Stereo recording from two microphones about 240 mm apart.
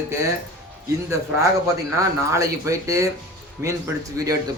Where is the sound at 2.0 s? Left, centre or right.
Centre.